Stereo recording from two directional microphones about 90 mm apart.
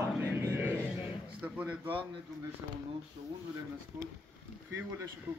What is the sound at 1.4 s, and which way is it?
Speech, 20° right (ahead or behind).